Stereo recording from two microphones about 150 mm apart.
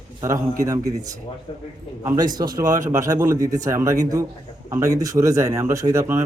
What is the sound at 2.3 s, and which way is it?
Speech, 25° right (ahead or behind).